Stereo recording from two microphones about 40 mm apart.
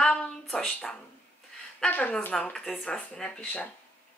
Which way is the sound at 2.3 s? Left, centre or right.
Left.